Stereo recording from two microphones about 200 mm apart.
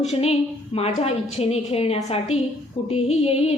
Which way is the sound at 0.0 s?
30° left (ahead or behind).